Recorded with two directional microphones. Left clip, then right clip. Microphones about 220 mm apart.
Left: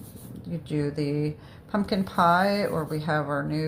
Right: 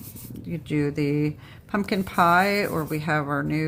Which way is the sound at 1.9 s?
25° right (ahead or behind).